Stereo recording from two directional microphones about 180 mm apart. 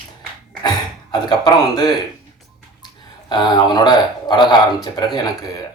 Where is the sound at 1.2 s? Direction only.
25° left (ahead or behind).